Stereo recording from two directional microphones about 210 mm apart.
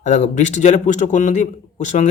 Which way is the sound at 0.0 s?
35° left (ahead or behind).